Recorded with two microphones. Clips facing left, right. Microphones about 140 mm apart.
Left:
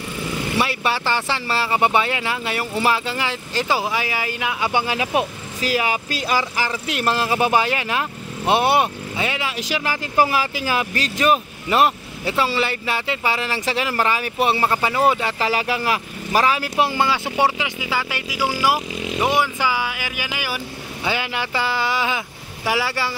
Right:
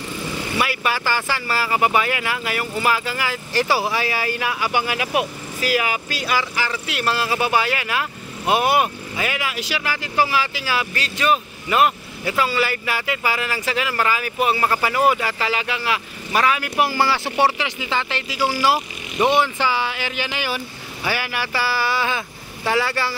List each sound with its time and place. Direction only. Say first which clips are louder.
0.6 s speech: even; 30° left (ahead or behind)
15.5 s speech: left 2 dB; 40° left (ahead or behind); by 23.1 s 15° left (ahead or behind)